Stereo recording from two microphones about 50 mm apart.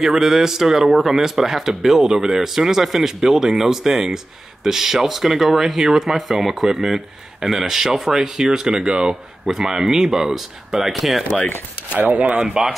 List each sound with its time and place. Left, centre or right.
0.0 s a man's voice: centre
12.0 s speech: right
12.4 s a man's voice: centre